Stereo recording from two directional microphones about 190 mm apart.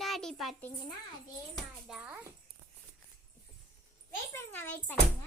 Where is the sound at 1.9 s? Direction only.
5° right (ahead or behind).